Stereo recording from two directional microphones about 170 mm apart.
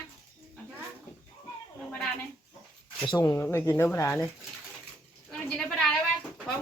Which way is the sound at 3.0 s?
20° left (ahead or behind).